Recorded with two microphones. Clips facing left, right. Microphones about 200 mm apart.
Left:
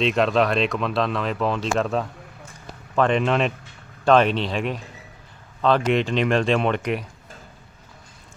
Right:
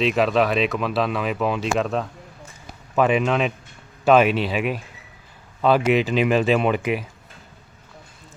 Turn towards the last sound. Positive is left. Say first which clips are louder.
# right 2 dB
turn(degrees=-5)  # may be behind; listen again after turning